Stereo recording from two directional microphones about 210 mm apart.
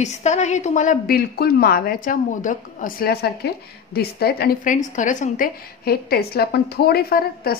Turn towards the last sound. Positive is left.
turn(degrees=45)  # may be behind; listen again after turning